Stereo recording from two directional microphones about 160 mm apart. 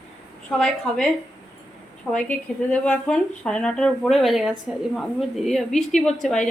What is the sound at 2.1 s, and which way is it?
Speech, 5° left (ahead or behind).